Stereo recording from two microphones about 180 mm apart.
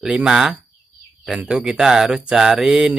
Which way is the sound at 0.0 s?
5° right (ahead or behind).